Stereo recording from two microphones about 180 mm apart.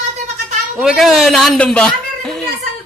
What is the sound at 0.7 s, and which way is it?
A child's voice, centre (ahead or behind).